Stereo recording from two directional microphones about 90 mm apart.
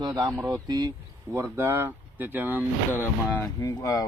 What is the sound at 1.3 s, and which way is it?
Speech, 25° right (ahead or behind).